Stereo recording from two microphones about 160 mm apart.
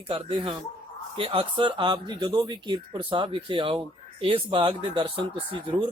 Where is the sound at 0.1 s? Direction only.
30° right (ahead or behind).